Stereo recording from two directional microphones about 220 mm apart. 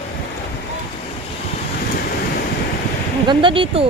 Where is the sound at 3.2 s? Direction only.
25° right (ahead or behind).